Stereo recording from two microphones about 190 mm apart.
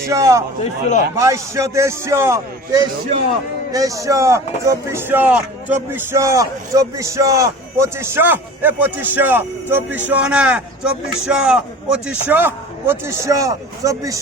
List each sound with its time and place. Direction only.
0.1 s a man's voice: 15° right (ahead or behind)
0.6 s a man's voice: 40° left (ahead or behind)
1.1 s a man's voice: 15° right (ahead or behind)